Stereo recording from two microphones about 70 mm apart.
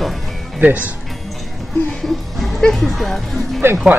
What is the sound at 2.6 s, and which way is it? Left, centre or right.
Speech, centre.